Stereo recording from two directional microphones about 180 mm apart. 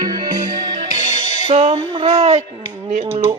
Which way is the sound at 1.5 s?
40° right (ahead or behind).